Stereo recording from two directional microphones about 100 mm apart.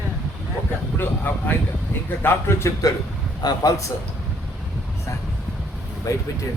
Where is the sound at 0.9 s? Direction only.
20° left (ahead or behind).